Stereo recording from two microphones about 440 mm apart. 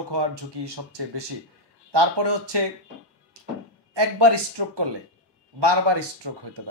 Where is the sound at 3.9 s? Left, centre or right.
Right.